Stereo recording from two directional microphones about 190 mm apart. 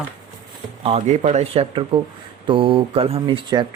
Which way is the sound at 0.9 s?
35° right (ahead or behind).